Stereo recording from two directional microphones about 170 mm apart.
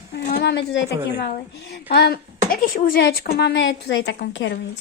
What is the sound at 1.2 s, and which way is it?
A child's voice, 75° left (ahead or behind).